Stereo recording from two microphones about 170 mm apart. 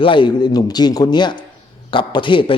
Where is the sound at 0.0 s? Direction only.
30° left (ahead or behind).